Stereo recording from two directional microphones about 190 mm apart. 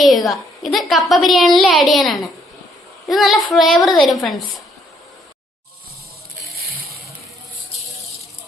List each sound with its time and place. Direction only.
0.0 s a woman's voice: centre (ahead or behind)